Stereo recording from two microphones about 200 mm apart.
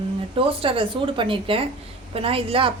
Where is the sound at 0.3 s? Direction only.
25° right (ahead or behind).